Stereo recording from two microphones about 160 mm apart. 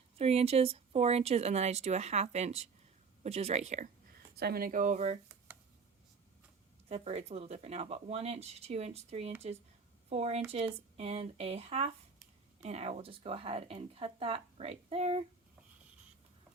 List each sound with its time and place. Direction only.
0.2 s speech: 40° right (ahead or behind)
4.4 s speech: 75° right (ahead or behind); by 5.1 s 50° right (ahead or behind)
6.8 s speech: 40° right (ahead or behind)